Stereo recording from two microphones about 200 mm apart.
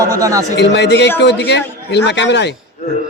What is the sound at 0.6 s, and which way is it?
A man's voice, 60° left (ahead or behind).